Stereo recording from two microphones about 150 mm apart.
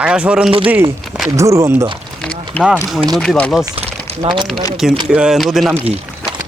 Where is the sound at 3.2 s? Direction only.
5° left (ahead or behind).